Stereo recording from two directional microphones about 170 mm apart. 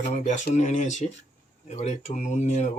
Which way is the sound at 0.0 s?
45° left (ahead or behind).